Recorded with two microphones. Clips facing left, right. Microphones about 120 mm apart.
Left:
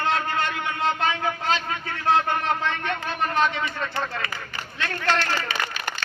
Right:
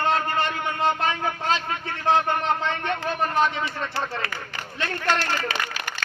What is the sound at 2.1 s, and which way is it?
A man's voice, 25° right (ahead or behind).